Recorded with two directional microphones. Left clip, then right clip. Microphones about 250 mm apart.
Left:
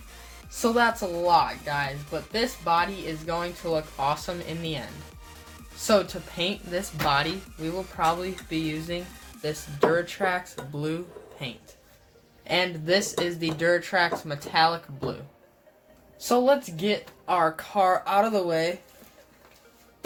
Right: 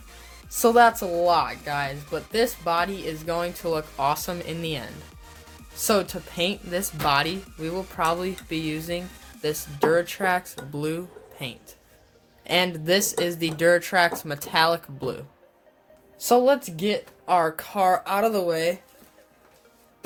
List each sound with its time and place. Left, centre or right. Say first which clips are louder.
0.5 s speech: right 6 dB; right